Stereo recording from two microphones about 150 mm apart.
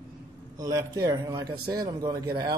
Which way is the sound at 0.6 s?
25° right (ahead or behind).